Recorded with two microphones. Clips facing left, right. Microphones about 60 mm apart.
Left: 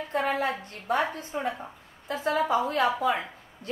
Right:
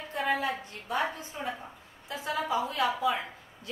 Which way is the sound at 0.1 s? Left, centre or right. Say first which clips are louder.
Left 2 dB; left.